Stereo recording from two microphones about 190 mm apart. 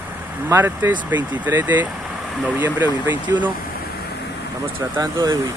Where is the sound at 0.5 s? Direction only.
10° right (ahead or behind).